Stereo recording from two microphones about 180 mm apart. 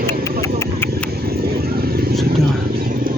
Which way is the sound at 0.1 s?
15° left (ahead or behind).